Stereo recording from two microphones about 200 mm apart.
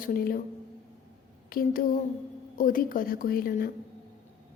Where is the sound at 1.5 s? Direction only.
45° left (ahead or behind).